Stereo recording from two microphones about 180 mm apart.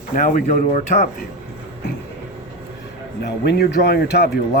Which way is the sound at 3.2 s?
65° left (ahead or behind).